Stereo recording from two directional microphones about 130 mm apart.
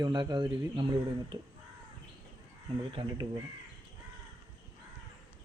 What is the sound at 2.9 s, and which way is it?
Speech, 35° right (ahead or behind).